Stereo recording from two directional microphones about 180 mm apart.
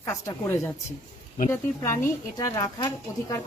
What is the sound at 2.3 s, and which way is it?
Speech, 20° left (ahead or behind).